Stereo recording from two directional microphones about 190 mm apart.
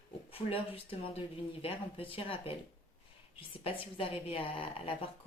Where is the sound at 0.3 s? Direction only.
30° left (ahead or behind).